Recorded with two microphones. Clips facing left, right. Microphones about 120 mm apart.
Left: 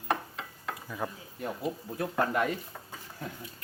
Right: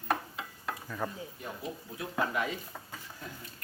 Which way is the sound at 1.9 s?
50° left (ahead or behind).